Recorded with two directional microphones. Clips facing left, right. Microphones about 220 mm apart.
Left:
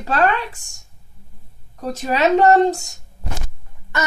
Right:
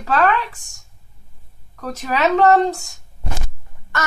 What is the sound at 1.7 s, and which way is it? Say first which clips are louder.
Speech: left 2 dB; 25° left (ahead or behind).